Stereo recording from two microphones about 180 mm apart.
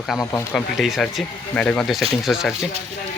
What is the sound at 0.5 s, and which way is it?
Speech, centre (ahead or behind).